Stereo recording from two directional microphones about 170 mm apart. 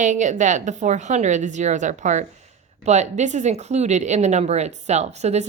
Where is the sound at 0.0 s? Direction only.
45° right (ahead or behind).